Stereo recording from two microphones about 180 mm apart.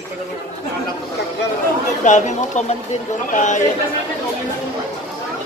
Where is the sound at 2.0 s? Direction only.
40° left (ahead or behind).